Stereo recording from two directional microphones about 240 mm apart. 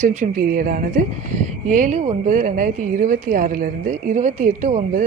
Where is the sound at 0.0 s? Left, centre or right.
Right.